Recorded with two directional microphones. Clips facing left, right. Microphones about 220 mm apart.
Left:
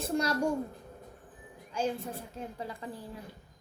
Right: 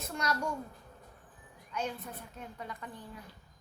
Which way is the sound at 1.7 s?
30° left (ahead or behind).